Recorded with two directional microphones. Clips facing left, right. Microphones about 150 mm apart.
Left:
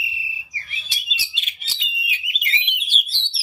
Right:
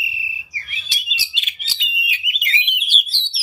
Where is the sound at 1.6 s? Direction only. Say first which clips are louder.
Right 5 dB; 90° right.